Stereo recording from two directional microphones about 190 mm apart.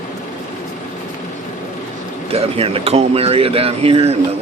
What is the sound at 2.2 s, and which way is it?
Speech, 30° right (ahead or behind).